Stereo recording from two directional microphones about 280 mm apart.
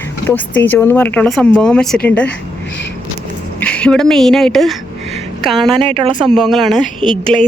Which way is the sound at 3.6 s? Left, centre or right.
Centre.